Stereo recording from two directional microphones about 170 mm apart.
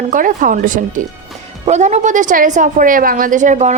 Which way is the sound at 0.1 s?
50° right (ahead or behind).